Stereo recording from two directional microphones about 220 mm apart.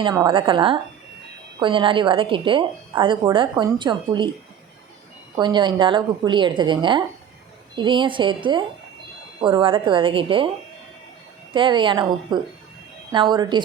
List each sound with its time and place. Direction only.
0.0 s a woman's voice: 20° right (ahead or behind)
5.4 s a woman's voice: 20° right (ahead or behind)
11.5 s a woman's voice: 20° right (ahead or behind)